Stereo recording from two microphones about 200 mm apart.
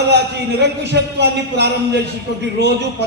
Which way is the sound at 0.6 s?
60° right (ahead or behind).